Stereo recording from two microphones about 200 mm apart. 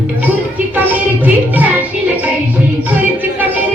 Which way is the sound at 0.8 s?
10° right (ahead or behind).